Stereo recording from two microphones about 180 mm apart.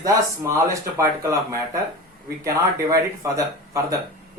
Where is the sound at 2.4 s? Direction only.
15° right (ahead or behind).